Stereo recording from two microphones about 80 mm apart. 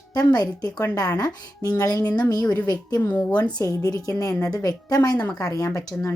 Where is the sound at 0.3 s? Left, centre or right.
Left.